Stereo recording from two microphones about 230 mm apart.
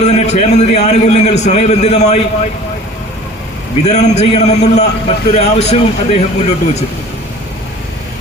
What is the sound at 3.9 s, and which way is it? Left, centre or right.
A man's voice, left.